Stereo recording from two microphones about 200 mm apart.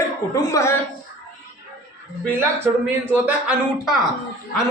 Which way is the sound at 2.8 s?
10° right (ahead or behind).